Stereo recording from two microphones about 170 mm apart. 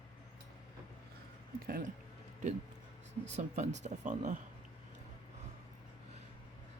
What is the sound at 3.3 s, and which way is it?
A woman's voice, 40° right (ahead or behind).